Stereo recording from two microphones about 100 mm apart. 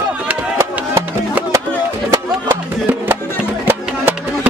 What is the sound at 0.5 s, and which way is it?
Music, 25° right (ahead or behind).